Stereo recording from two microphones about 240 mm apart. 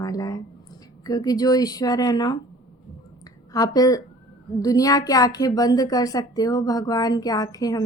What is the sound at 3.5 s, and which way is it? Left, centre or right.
A woman's voice, centre.